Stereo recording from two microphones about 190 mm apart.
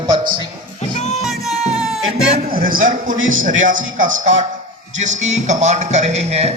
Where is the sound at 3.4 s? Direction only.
45° right (ahead or behind).